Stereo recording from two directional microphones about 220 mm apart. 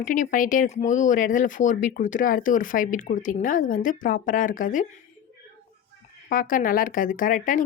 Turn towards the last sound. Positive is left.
turn(degrees=35)  # may be behind; listen again after turning